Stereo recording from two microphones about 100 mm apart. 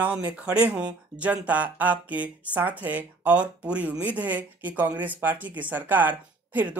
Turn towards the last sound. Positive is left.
turn(degrees=-15)  # may be behind; listen again after turning